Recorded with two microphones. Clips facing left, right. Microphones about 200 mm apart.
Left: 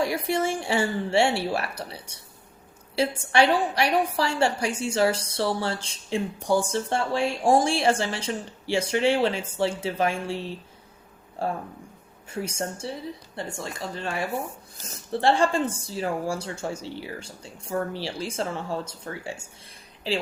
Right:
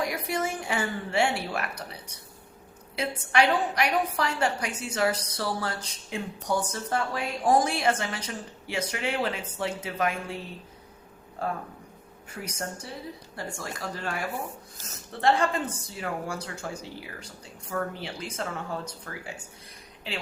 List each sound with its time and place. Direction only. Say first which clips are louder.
0.0 s a woman's voice: left 4 dB; 30° left (ahead or behind)
3.2 s a woman's voice: left 1 dB; 30° left (ahead or behind)